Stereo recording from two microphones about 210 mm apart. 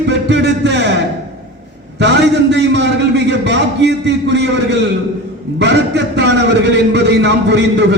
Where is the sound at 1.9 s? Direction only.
55° right (ahead or behind).